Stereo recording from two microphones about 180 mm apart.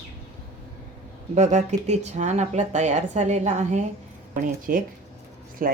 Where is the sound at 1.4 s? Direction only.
40° right (ahead or behind).